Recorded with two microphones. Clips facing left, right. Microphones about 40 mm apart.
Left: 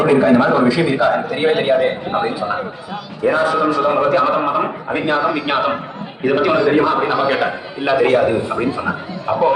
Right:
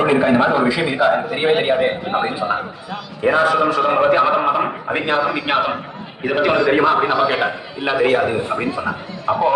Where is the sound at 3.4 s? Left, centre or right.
Right.